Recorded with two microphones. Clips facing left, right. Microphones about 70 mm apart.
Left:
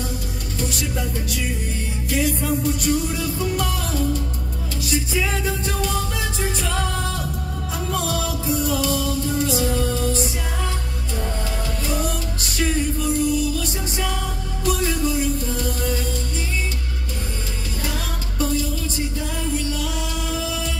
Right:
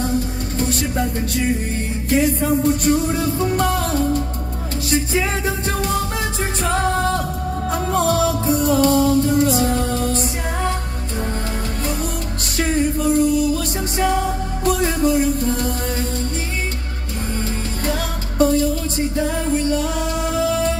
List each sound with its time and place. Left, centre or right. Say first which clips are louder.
0.6 s music: right 6 dB; right
12.5 s music: right 4 dB; right
18.4 s music: right 8 dB; right